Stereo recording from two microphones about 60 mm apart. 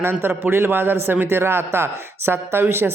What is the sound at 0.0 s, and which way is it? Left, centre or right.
Speech, right.